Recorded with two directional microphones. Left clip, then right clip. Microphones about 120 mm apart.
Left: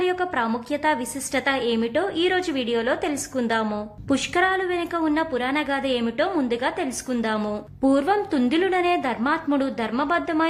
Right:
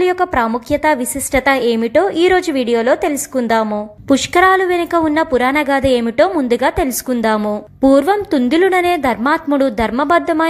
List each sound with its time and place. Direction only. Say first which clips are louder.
0.0 s a woman's voice: right 9 dB; 45° right (ahead or behind)